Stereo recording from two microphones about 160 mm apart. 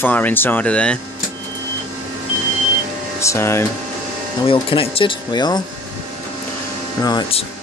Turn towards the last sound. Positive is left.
turn(degrees=25)  # may be behind; listen again after turning